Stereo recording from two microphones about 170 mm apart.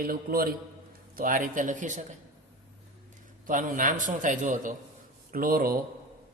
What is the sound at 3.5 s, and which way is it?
A man's voice, 50° right (ahead or behind).